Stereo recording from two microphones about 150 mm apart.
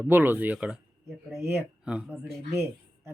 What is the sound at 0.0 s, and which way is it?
Speech, 15° right (ahead or behind).